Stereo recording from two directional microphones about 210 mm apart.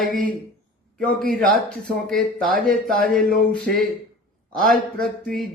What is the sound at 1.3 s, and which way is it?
Speech, 5° left (ahead or behind).